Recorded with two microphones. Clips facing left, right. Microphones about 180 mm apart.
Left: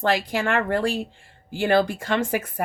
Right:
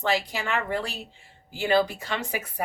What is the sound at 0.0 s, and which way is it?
Speech, 50° left (ahead or behind).